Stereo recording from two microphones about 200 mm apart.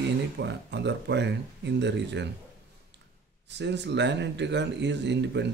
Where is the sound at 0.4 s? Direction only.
60° right (ahead or behind).